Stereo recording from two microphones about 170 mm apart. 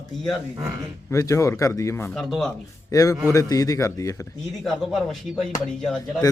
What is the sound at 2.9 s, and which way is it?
A man's voice, 20° left (ahead or behind).